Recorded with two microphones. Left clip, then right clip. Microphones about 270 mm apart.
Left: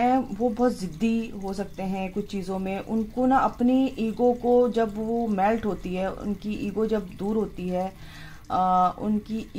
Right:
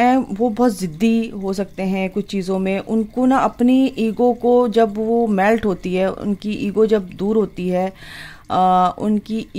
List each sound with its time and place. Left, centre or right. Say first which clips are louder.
0.0 s speech: right 7 dB; right